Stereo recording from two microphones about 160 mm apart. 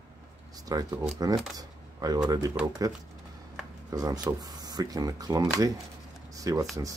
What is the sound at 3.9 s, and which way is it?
Speech, 25° right (ahead or behind).